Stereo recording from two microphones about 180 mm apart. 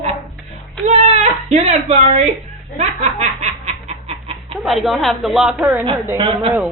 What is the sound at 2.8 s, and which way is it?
Snicker, 40° right (ahead or behind).